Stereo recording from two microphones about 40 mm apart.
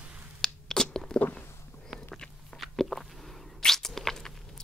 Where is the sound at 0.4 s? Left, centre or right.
Centre.